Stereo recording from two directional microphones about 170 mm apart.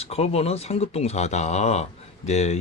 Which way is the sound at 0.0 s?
35° left (ahead or behind).